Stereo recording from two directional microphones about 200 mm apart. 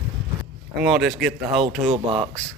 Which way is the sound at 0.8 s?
Centre (ahead or behind).